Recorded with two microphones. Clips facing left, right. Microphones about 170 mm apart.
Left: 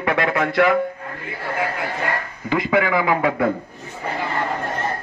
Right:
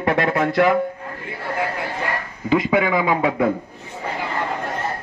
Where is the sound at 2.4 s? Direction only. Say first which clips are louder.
Right 2 dB; 20° right (ahead or behind).